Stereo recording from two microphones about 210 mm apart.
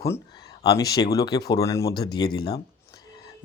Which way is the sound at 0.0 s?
15° left (ahead or behind).